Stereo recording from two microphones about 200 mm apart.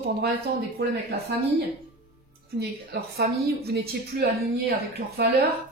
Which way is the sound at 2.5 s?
55° right (ahead or behind).